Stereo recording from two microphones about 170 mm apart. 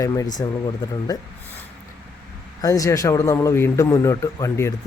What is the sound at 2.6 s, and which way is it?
Speech, 20° left (ahead or behind).